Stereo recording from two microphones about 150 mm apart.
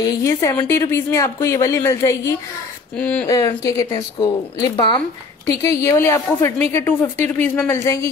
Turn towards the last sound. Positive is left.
turn(degrees=20)  # may be behind; listen again after turning